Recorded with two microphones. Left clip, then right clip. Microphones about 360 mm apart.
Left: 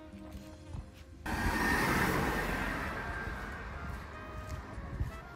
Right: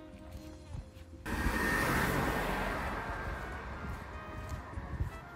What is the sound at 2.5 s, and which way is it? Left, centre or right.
Music, right.